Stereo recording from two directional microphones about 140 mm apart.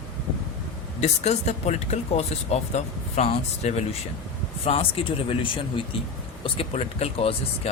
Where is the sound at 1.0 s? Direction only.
50° left (ahead or behind).